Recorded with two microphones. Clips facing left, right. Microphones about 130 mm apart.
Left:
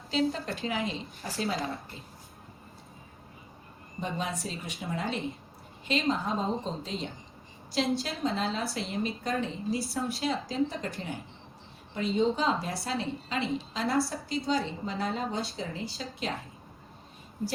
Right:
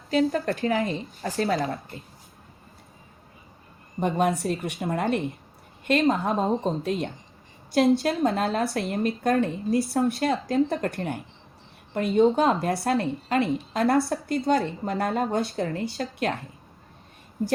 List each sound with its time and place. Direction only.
0.1 s a woman's voice: 55° right (ahead or behind)
4.0 s a woman's voice: 55° right (ahead or behind)